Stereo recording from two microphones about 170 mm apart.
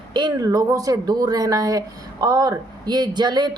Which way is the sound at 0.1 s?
25° right (ahead or behind).